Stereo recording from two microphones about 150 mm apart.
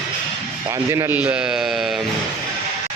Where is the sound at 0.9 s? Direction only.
20° right (ahead or behind).